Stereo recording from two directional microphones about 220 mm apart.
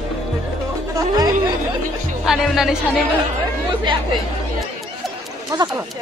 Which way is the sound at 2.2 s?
Centre (ahead or behind).